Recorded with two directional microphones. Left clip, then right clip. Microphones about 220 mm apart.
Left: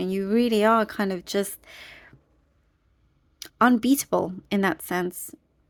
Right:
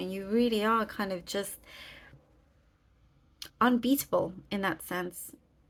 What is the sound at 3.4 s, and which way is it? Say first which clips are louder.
Speech: left 6 dB; 40° left (ahead or behind).